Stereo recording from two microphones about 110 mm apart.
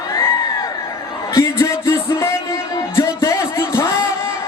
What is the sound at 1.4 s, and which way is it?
Music, 25° left (ahead or behind).